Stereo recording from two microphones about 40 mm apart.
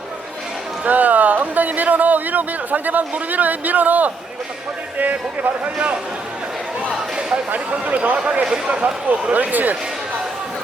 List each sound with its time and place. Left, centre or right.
0.9 s speech: right
7.5 s speech: right
9.3 s speech: right